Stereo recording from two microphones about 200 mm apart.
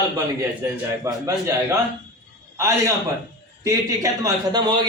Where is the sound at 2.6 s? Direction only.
15° right (ahead or behind).